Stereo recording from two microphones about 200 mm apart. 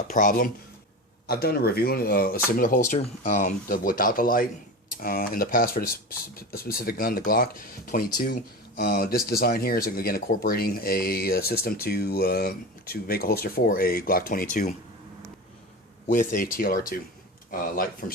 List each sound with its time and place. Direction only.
0.1 s speech: 45° left (ahead or behind)
16.0 s speech: 40° left (ahead or behind)